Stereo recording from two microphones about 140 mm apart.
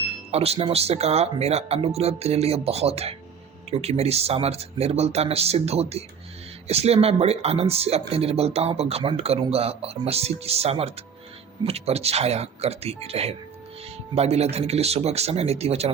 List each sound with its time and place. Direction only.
0.3 s speech: 45° right (ahead or behind)